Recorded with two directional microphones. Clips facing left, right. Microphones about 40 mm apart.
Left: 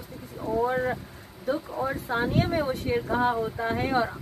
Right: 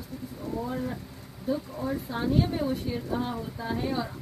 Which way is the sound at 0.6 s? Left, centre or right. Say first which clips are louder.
Left 8 dB; left.